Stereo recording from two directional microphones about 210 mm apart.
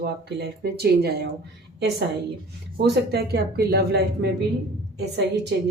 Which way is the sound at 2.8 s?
50° right (ahead or behind).